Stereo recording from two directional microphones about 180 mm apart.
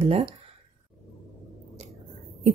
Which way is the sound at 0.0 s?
30° right (ahead or behind).